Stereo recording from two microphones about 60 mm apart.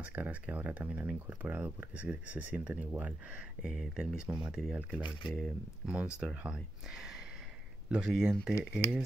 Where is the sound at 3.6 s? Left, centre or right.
Centre.